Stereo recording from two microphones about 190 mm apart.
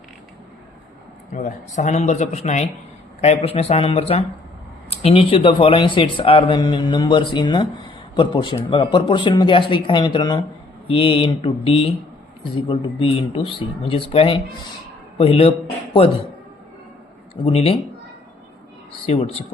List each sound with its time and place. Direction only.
1.3 s speech: 40° left (ahead or behind)
17.4 s speech: 30° left (ahead or behind)
19.0 s speech: 30° left (ahead or behind)